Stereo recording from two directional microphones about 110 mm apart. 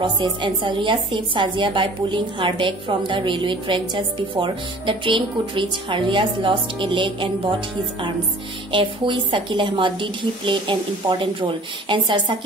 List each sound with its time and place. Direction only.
0.0 s a woman's voice: 45° right (ahead or behind)
8.7 s a woman's voice: 50° right (ahead or behind)